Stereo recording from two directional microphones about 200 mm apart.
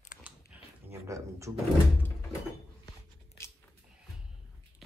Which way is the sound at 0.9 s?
15° right (ahead or behind).